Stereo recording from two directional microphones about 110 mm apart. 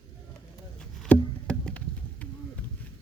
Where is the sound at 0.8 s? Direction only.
10° left (ahead or behind).